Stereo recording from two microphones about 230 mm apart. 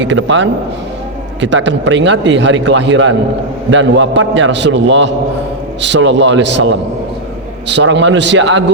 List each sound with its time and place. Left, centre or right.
0.0 s a man's voice: right